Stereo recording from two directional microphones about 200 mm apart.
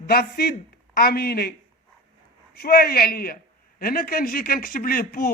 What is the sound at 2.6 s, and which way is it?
Speech, 50° left (ahead or behind).